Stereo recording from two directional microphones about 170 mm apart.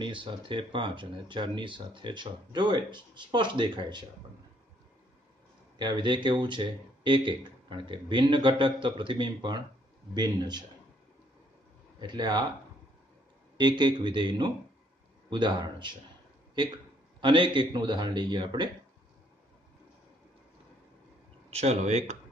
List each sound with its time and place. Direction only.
0.0 s speech: 30° right (ahead or behind)
5.8 s speech: 25° right (ahead or behind)
12.0 s speech: 25° right (ahead or behind)
13.6 s speech: 25° right (ahead or behind)
17.2 s speech: 30° right (ahead or behind)
21.5 s speech: 35° right (ahead or behind)